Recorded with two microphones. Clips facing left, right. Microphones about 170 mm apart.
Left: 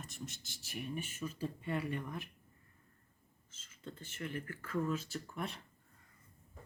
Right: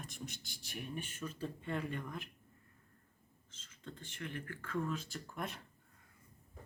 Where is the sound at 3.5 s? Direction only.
5° left (ahead or behind).